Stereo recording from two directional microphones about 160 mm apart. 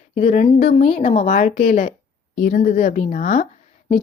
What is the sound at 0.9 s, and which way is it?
Speech, 45° left (ahead or behind).